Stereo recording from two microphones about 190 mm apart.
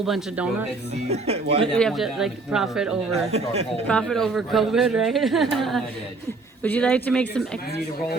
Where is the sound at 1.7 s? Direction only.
Centre (ahead or behind).